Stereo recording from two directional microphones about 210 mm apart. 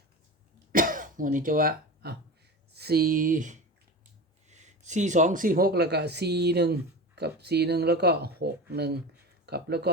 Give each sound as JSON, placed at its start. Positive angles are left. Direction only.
{"t": 0.7, "sound": "throat clearing", "side_deg": -40}
{"t": 2.7, "sound": "speech", "side_deg": -50}